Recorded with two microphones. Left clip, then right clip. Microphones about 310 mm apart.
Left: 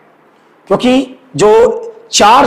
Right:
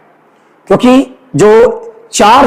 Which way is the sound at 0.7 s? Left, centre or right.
Right.